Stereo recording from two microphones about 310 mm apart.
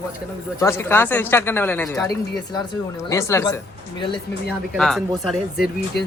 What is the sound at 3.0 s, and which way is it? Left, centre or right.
Speech, centre.